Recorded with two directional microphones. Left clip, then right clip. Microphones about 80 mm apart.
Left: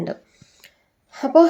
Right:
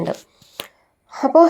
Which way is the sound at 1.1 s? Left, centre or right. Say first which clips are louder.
Right 2 dB; right.